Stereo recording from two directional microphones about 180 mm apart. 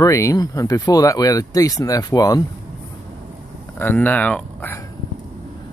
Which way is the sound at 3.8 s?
10° left (ahead or behind).